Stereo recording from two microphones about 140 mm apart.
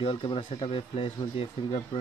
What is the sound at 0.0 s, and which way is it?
Speech, 40° left (ahead or behind).